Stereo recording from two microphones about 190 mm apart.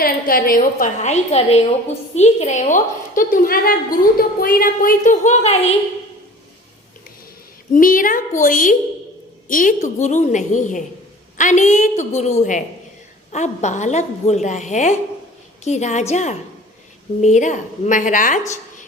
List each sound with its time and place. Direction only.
0.0 s a woman's voice: 50° left (ahead or behind)
7.7 s a woman's voice: 45° left (ahead or behind)